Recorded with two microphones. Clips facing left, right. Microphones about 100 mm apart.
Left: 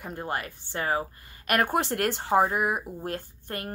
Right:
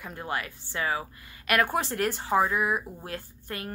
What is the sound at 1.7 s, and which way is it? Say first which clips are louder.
Speech: left 2 dB; 60° left (ahead or behind).